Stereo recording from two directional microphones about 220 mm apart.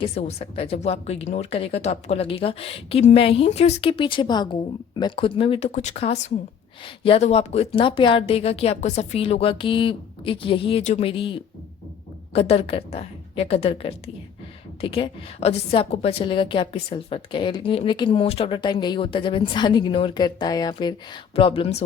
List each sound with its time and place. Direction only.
0.0 s a woman's voice: 30° left (ahead or behind)